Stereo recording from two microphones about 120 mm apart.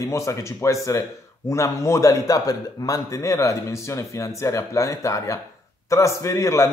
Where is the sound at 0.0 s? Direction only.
25° left (ahead or behind).